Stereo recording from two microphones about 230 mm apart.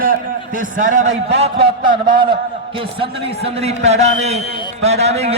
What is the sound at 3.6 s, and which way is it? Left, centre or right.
A man's voice, right.